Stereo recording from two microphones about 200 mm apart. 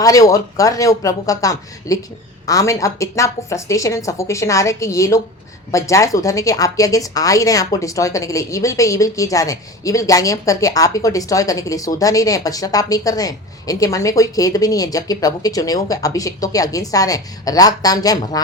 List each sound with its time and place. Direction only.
0.0 s speech: 15° left (ahead or behind)